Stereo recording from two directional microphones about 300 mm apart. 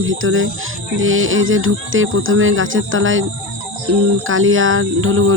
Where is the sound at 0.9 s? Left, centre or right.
Right.